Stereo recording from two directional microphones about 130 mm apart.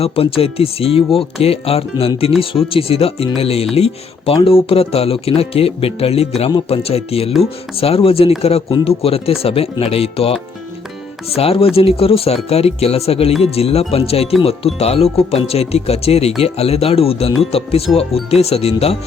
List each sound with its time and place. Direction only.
0.0 s speech: 45° left (ahead or behind)
11.3 s speech: 50° left (ahead or behind)